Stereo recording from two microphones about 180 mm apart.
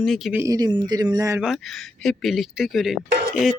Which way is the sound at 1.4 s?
Centre (ahead or behind).